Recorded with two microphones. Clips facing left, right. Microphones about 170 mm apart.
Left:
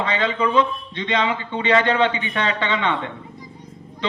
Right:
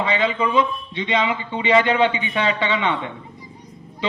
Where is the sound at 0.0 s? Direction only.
10° right (ahead or behind).